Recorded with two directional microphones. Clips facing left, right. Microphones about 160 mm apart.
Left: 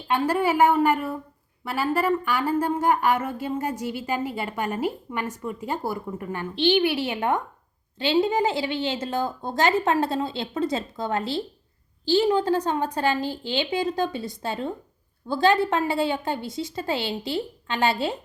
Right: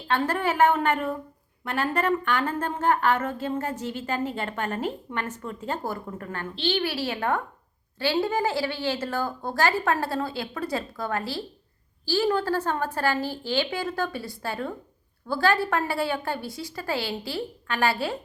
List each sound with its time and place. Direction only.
0.1 s a woman's voice: 10° left (ahead or behind)